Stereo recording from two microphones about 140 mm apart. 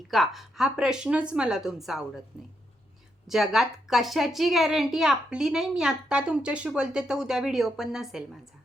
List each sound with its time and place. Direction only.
0.1 s a woman's voice: centre (ahead or behind)
3.2 s a woman's voice: 5° right (ahead or behind)